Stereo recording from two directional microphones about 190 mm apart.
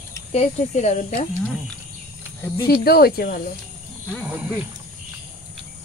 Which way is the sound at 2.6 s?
55° left (ahead or behind).